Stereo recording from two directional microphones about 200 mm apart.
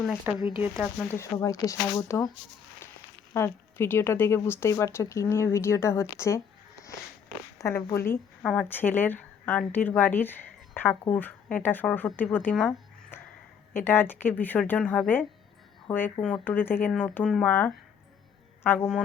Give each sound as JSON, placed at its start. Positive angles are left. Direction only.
{"t": 0.0, "sound": "speech", "side_deg": 0}
{"t": 0.3, "sound": "speech", "side_deg": 25}
{"t": 0.6, "sound": "speech", "side_deg": -5}
{"t": 1.0, "sound": "a woman's voice", "side_deg": 10}
{"t": 3.3, "sound": "a woman's voice", "side_deg": 10}
{"t": 7.6, "sound": "a woman's voice", "side_deg": 15}